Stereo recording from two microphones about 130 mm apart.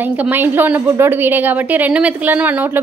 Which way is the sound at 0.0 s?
15° right (ahead or behind).